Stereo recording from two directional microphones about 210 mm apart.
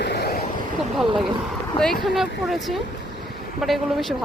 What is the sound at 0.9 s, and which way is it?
Speech, centre (ahead or behind).